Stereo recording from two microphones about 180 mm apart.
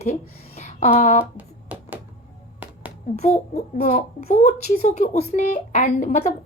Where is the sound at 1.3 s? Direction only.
5° right (ahead or behind).